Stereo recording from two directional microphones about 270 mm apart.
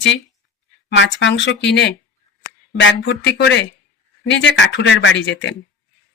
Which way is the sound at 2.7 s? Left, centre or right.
Left.